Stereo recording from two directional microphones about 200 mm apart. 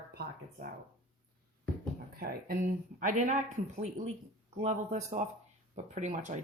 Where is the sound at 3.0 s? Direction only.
40° right (ahead or behind).